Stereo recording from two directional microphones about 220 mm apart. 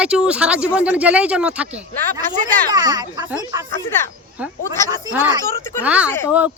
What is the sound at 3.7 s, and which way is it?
Speech, 10° left (ahead or behind).